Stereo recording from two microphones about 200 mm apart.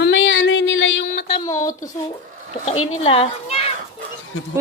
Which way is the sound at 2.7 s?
90° left.